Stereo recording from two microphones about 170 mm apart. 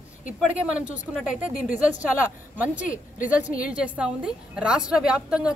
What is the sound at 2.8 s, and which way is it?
Speech, 50° left (ahead or behind).